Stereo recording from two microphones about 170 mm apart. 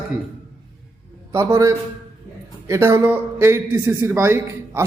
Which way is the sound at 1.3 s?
15° right (ahead or behind).